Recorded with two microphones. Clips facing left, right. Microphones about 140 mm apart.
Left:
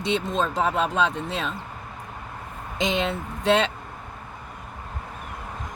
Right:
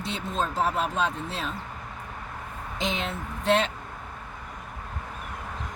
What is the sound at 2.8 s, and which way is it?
Speech, 90° left.